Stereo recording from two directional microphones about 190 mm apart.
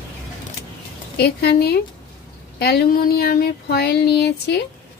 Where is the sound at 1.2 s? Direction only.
60° left (ahead or behind).